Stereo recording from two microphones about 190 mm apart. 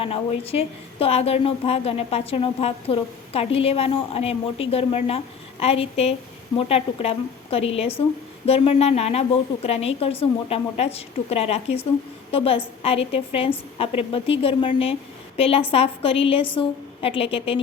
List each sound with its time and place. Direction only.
0.0 s a woman's voice: 30° left (ahead or behind)